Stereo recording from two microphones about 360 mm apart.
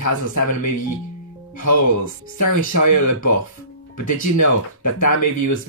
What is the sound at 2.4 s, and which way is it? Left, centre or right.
Speech, left.